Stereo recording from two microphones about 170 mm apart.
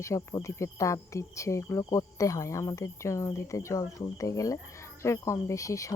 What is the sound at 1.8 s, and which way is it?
Speech, 20° left (ahead or behind).